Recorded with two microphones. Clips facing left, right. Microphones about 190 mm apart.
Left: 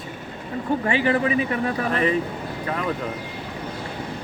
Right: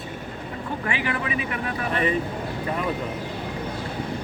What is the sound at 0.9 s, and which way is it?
Speech, 35° left (ahead or behind).